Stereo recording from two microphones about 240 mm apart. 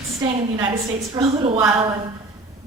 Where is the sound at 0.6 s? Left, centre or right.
Centre.